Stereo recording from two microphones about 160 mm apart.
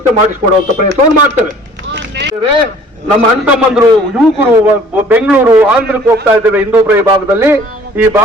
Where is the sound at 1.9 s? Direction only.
90° right.